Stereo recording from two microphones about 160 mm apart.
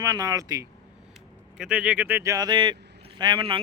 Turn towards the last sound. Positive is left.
turn(degrees=-30)  # may be behind; listen again after turning